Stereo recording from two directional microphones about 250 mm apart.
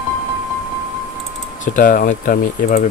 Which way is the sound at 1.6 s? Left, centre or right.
Left.